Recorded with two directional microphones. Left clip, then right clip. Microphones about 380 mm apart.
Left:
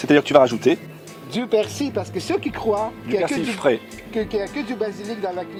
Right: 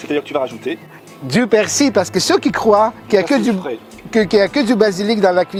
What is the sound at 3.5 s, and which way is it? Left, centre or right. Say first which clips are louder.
Speech: left 3 dB; left.